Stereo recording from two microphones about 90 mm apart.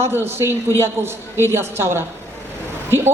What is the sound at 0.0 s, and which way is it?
A man's voice, 25° right (ahead or behind).